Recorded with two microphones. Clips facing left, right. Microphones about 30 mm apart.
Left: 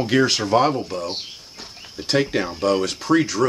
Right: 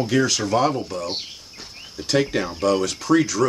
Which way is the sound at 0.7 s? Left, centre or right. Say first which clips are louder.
Left 1 dB; centre.